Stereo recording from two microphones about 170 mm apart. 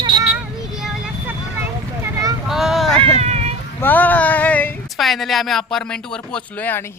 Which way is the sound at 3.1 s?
40° right (ahead or behind).